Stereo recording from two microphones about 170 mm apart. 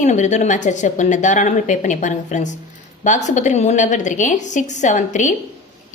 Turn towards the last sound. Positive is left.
turn(degrees=45)  # may be behind; listen again after turning